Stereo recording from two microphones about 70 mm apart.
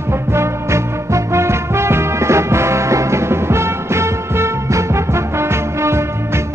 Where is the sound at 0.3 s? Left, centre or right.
Right.